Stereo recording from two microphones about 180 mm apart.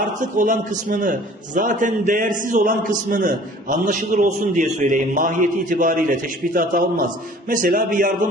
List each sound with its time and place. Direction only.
0.0 s a man's voice: 45° right (ahead or behind)